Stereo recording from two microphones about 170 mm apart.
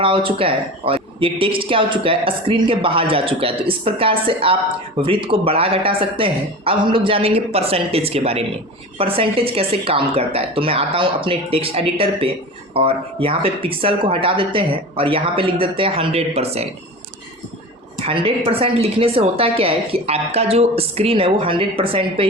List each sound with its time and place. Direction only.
0.0 s speech: 30° right (ahead or behind)
18.0 s speech: 30° right (ahead or behind)